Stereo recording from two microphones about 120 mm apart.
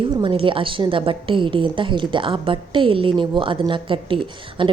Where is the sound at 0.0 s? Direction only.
45° right (ahead or behind).